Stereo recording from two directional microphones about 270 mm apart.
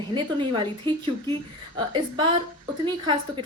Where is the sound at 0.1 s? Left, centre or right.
Centre.